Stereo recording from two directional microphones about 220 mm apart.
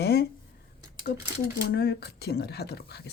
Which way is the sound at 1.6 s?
45° left (ahead or behind).